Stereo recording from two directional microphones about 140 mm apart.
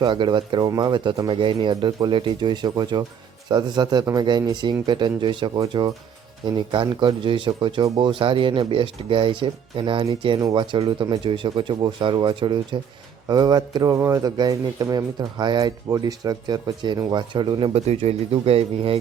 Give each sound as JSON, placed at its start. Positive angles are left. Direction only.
{"t": 0.0, "sound": "speech", "side_deg": -35}
{"t": 17.7, "sound": "speech", "side_deg": -50}